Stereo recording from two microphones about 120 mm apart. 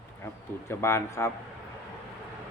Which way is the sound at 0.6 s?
20° left (ahead or behind).